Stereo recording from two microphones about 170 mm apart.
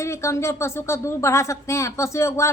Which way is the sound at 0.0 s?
15° left (ahead or behind).